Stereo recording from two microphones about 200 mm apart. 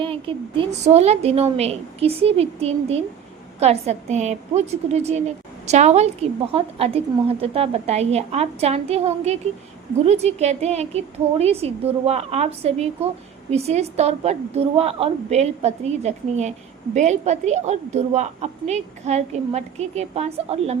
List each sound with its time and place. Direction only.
0.0 s a woman's voice: 25° right (ahead or behind)